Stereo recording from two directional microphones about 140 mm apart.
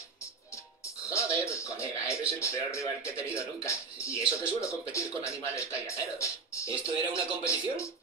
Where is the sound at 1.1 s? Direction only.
20° left (ahead or behind).